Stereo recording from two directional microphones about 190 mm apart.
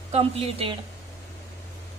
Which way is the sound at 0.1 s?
30° right (ahead or behind).